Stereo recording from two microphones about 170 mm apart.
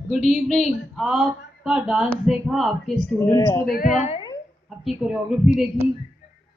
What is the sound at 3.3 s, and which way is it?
Speech, 20° left (ahead or behind).